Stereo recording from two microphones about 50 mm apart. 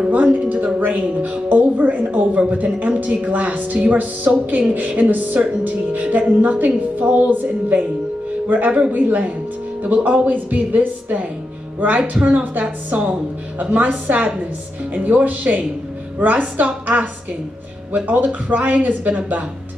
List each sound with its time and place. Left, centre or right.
0.1 s a woman's voice: right
13.6 s a woman's voice: right